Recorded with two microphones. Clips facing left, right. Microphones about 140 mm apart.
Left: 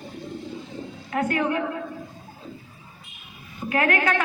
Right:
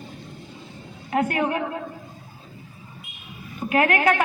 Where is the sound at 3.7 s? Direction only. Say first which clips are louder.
Right 3 dB; 20° right (ahead or behind).